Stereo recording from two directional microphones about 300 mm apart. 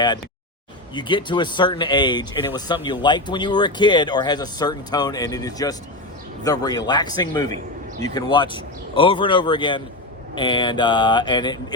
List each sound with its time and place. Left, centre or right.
0.9 s speech: centre